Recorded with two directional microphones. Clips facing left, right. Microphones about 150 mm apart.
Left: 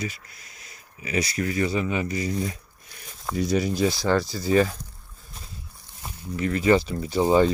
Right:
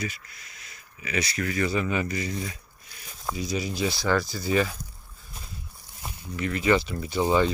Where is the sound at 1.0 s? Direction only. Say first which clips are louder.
Left 3 dB; 35° left (ahead or behind).